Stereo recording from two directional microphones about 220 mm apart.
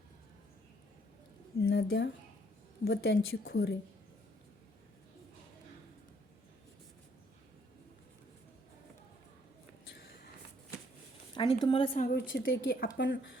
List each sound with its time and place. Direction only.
1.5 s a woman's voice: 60° left (ahead or behind)
11.3 s a woman's voice: 25° left (ahead or behind)
11.9 s a woman's voice: 40° left (ahead or behind)
12.3 s speech: 55° left (ahead or behind)